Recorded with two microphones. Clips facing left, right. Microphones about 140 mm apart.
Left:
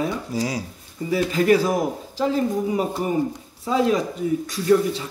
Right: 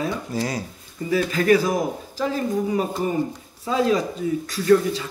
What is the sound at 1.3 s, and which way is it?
Speech, 20° left (ahead or behind).